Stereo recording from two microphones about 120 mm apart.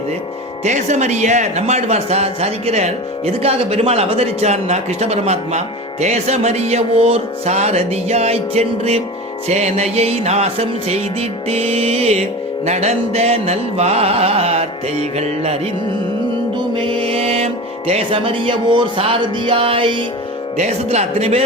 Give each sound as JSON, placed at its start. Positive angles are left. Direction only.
{"t": 0.6, "sound": "speech", "side_deg": -75}
{"t": 16.7, "sound": "music", "side_deg": -50}
{"t": 20.6, "sound": "speech", "side_deg": -65}